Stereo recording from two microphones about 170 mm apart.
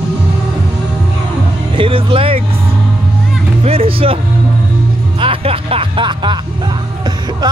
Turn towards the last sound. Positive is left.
turn(degrees=-25)  # may be behind; listen again after turning